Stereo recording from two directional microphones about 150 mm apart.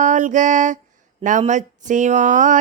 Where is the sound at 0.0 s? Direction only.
55° right (ahead or behind).